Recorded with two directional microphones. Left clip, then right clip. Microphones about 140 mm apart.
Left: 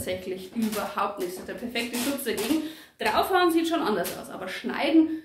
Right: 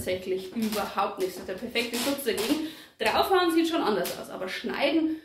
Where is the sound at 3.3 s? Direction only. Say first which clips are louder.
Left 1 dB; 30° left (ahead or behind).